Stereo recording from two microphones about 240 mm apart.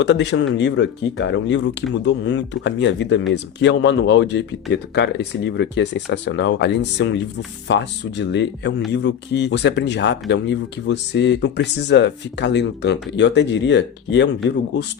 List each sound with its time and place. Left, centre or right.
0.0 s speech: left